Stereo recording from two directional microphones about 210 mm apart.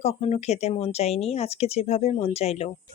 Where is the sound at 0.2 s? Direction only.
30° left (ahead or behind).